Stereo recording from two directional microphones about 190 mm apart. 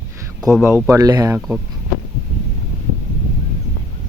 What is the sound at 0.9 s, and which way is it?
Speech, 20° right (ahead or behind).